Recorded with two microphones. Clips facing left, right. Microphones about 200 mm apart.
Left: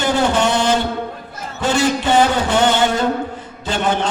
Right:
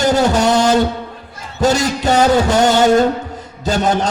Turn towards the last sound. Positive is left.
turn(degrees=-40)  # may be behind; listen again after turning